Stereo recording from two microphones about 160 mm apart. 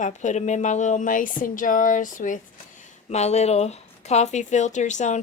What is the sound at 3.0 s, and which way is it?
Speech, 45° left (ahead or behind).